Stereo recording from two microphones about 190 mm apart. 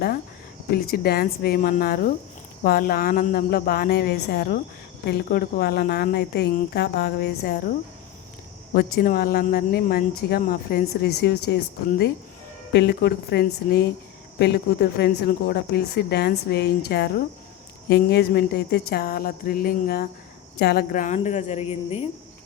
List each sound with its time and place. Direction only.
0.7 s a woman's voice: 55° left (ahead or behind)
8.7 s a woman's voice: 50° left (ahead or behind); by 22.0 s 30° left (ahead or behind)